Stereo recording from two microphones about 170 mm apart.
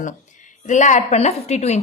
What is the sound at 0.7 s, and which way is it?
A woman's voice, 45° left (ahead or behind).